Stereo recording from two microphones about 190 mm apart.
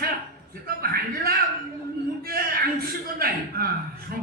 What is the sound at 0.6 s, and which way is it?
Speech, 50° right (ahead or behind).